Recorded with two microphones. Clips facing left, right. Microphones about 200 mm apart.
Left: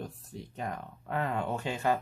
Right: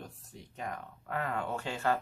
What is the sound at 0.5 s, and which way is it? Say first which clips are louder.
Speech: left 2 dB; 25° left (ahead or behind).